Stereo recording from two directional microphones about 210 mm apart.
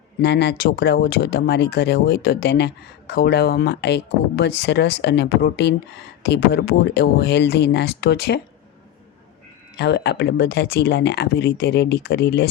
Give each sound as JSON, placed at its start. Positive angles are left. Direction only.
{"t": 0.2, "sound": "speech", "side_deg": 55}
{"t": 9.7, "sound": "speech", "side_deg": 55}